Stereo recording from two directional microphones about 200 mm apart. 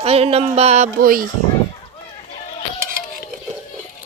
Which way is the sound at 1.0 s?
45° right (ahead or behind).